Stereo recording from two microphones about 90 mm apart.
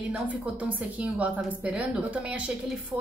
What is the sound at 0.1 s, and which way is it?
A woman's voice, 15° right (ahead or behind).